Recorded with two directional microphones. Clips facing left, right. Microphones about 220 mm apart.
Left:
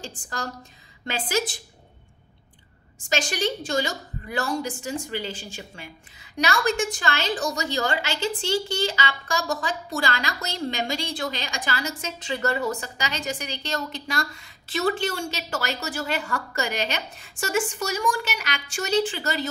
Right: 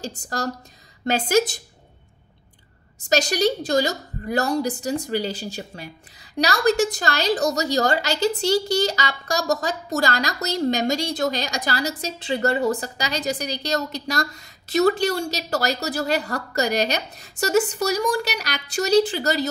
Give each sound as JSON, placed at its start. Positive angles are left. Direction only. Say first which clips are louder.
{"t": 0.0, "sound": "a woman's voice", "louder": "right 6 dB", "side_deg": -40}
{"t": 3.1, "sound": "a woman's voice", "louder": "right 6 dB", "side_deg": -40}